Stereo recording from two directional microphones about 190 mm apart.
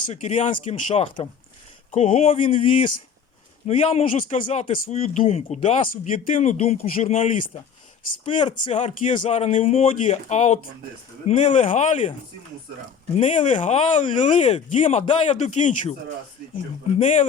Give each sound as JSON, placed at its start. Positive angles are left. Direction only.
{"t": 0.1, "sound": "speech", "side_deg": 35}
{"t": 4.2, "sound": "speech", "side_deg": 40}
{"t": 5.9, "sound": "speech", "side_deg": 45}
{"t": 8.2, "sound": "speech", "side_deg": 25}
{"t": 8.7, "sound": "speech", "side_deg": 40}
{"t": 13.1, "sound": "speech", "side_deg": 40}
{"t": 17.0, "sound": "speech", "side_deg": 40}